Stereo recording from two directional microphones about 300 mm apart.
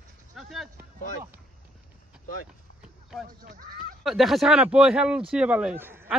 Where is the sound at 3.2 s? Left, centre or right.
Right.